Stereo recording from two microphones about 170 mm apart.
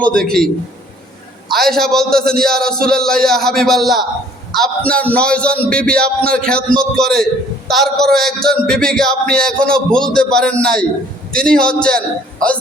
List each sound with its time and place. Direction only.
0.0 s a man's voice: 5° left (ahead or behind)
1.5 s a man's voice: centre (ahead or behind)